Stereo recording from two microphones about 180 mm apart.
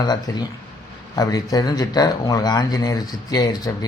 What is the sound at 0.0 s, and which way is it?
Speech, 20° left (ahead or behind).